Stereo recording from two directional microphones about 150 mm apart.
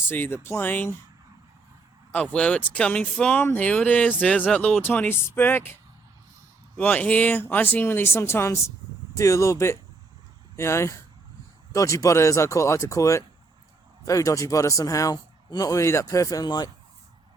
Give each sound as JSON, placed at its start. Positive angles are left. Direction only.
{"t": 0.1, "sound": "speech", "side_deg": 15}
{"t": 2.1, "sound": "speech", "side_deg": 5}
{"t": 6.7, "sound": "a man's voice", "side_deg": 10}